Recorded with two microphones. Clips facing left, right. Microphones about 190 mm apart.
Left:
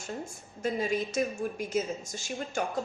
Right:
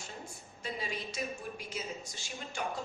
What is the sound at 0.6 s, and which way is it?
A woman's voice, 45° left (ahead or behind).